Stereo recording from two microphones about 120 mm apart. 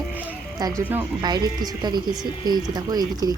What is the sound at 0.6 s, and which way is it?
Speech, 30° right (ahead or behind).